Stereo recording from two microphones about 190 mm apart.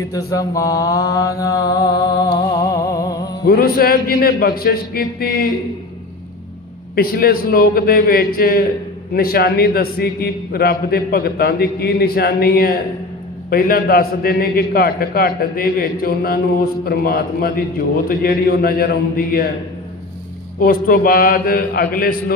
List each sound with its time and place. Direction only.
0.1 s mantra: 15° left (ahead or behind)
3.4 s a man's voice: 50° left (ahead or behind)
7.0 s a man's voice: 50° left (ahead or behind)
20.6 s a man's voice: 50° left (ahead or behind)